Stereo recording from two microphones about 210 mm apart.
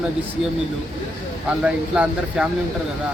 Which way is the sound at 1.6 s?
5° right (ahead or behind).